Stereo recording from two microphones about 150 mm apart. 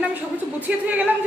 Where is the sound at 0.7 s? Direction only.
10° right (ahead or behind).